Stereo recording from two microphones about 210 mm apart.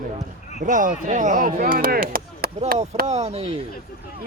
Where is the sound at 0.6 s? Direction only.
40° right (ahead or behind).